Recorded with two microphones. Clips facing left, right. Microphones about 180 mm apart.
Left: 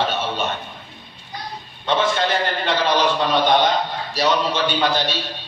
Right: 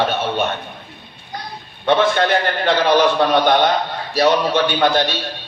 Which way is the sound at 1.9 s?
65° right (ahead or behind).